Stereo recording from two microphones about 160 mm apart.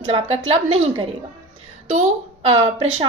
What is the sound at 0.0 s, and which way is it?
A woman's voice, 35° right (ahead or behind).